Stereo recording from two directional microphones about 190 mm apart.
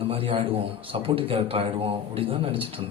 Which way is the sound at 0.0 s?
30° right (ahead or behind).